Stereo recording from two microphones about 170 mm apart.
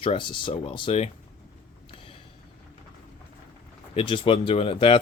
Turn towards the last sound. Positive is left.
turn(degrees=30)  # may be behind; listen again after turning